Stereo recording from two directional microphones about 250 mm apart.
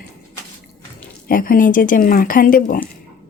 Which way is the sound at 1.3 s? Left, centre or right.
Left.